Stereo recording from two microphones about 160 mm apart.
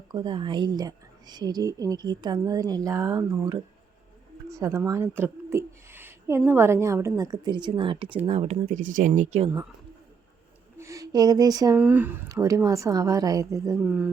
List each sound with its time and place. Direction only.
0.1 s speech: 30° right (ahead or behind); by 9.5 s 45° right (ahead or behind)
10.8 s speech: 20° right (ahead or behind)
11.8 s speech: 10° right (ahead or behind)